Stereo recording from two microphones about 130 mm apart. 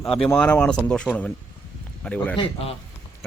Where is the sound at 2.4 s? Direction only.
50° left (ahead or behind).